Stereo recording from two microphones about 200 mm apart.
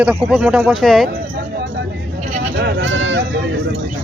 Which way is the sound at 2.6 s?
55° right (ahead or behind).